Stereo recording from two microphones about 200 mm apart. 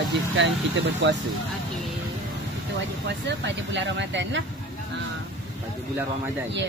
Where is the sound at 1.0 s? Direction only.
65° right (ahead or behind).